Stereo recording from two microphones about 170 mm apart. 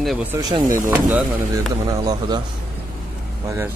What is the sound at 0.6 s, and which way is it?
Speech, 50° right (ahead or behind).